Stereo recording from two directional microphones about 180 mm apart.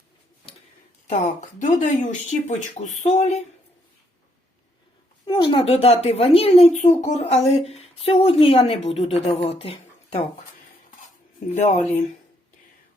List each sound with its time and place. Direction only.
1.0 s a woman's voice: 40° left (ahead or behind)
5.2 s a woman's voice: 30° left (ahead or behind)
11.5 s a woman's voice: 40° left (ahead or behind)